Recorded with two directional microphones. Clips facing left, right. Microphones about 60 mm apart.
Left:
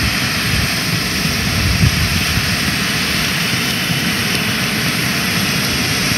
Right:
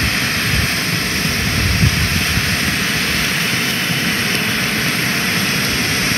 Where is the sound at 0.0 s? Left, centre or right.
Right.